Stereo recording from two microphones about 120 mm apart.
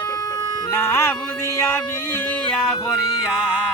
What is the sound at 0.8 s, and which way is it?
Music, 25° left (ahead or behind).